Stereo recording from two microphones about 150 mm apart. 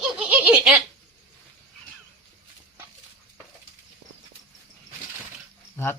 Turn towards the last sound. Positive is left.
turn(degrees=15)  # may be behind; listen again after turning